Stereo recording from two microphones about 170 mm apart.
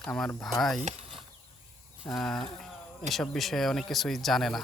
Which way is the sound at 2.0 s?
Centre (ahead or behind).